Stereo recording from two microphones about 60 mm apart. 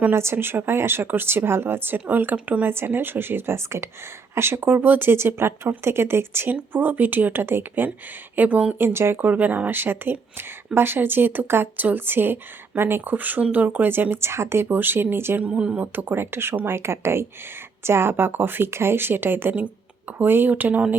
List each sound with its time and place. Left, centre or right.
0.1 s speech: right
2.6 s speech: right
8.4 s speech: right
8.8 s speech: right
15.4 s speech: right
15.8 s speech: right